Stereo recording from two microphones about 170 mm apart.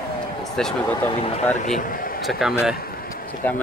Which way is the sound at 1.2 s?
35° left (ahead or behind).